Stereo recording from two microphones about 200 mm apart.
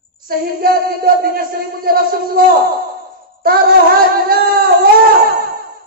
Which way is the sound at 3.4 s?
50° right (ahead or behind).